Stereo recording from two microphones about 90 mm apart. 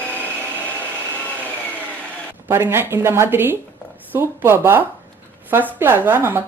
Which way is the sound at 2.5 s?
25° right (ahead or behind).